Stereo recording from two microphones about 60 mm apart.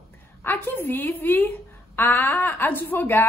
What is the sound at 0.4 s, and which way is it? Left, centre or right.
A woman's voice, left.